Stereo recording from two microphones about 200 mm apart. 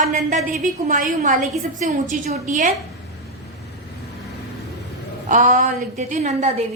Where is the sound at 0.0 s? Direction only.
40° right (ahead or behind).